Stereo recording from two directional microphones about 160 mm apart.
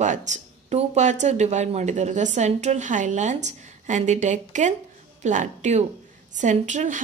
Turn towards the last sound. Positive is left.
turn(degrees=-50)  # may be behind; listen again after turning